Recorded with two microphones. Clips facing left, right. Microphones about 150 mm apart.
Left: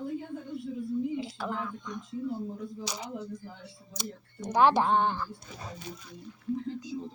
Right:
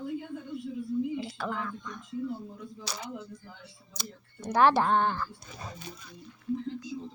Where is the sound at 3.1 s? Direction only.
35° left (ahead or behind).